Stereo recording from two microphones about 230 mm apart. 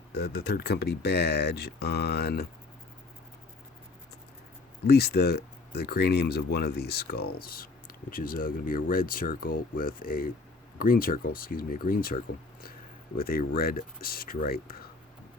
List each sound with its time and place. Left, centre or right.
0.1 s speech: left
4.9 s speech: left